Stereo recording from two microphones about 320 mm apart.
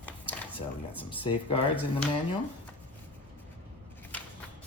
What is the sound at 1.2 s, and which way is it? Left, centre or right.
Speech, centre.